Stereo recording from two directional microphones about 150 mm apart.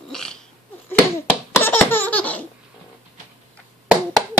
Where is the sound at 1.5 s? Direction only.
15° left (ahead or behind).